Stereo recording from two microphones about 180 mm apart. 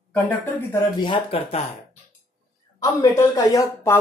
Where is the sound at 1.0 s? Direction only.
30° left (ahead or behind).